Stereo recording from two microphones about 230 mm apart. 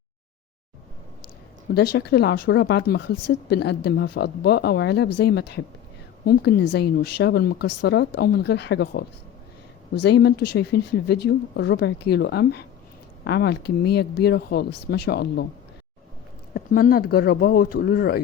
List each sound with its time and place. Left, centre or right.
1.7 s speech: left
16.6 s speech: left